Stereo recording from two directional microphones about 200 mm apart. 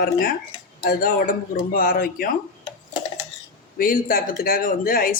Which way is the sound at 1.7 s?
45° left (ahead or behind).